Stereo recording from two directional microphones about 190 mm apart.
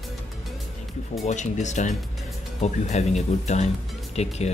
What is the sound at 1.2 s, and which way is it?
Speech, 40° left (ahead or behind).